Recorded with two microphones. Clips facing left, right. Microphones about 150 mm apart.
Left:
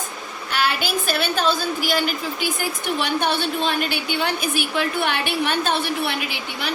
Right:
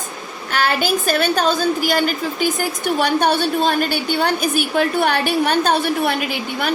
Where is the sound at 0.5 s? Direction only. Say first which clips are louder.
Right 4 dB; 45° right (ahead or behind).